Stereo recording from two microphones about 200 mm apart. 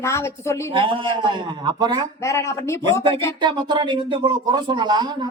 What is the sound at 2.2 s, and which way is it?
Speech, 15° left (ahead or behind).